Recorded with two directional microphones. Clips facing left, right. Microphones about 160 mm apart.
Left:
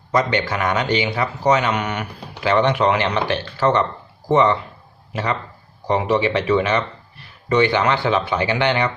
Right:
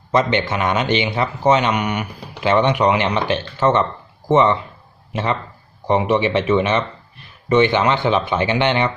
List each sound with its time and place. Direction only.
0.1 s speech: 25° right (ahead or behind)